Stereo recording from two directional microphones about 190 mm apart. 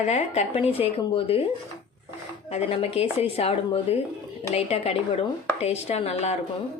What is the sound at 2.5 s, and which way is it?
A woman's voice, 30° left (ahead or behind).